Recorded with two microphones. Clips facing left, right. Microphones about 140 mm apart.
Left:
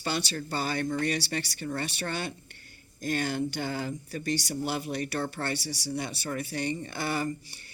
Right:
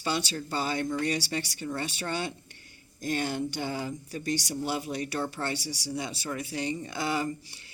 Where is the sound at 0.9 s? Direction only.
55° left (ahead or behind).